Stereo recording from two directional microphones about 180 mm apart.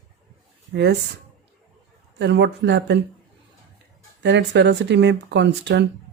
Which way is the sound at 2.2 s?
75° right (ahead or behind).